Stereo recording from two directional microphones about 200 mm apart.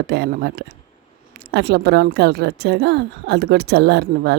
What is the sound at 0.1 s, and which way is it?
A woman's voice, 50° right (ahead or behind).